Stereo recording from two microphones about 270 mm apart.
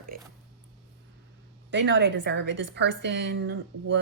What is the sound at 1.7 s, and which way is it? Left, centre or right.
Speech, right.